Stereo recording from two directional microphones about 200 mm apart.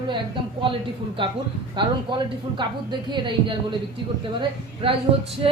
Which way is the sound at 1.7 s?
25° right (ahead or behind).